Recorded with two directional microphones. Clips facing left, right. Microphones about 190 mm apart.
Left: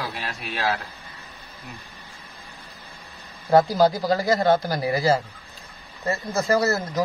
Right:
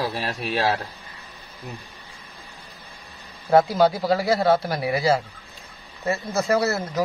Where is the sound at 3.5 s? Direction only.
Centre (ahead or behind).